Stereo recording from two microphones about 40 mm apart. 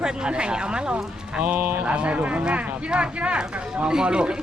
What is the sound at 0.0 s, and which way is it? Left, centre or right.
Speech, right.